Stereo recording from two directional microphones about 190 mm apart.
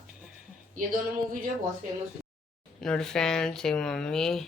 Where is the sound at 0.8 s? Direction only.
45° right (ahead or behind).